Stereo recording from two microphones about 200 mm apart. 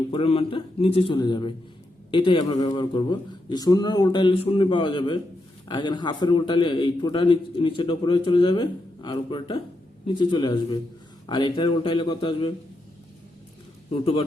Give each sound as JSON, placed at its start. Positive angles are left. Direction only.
{"t": 0.1, "sound": "a man's voice", "side_deg": 30}
{"t": 13.9, "sound": "a man's voice", "side_deg": 30}